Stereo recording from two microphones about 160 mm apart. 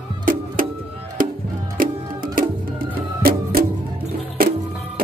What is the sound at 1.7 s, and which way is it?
Music, 60° right (ahead or behind).